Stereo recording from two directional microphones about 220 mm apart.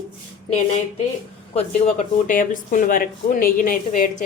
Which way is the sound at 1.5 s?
30° left (ahead or behind).